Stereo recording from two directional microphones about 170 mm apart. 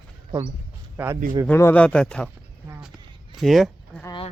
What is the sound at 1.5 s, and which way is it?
Speech, 10° left (ahead or behind).